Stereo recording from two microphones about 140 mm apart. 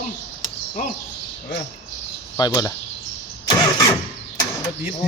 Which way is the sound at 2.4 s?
25° left (ahead or behind).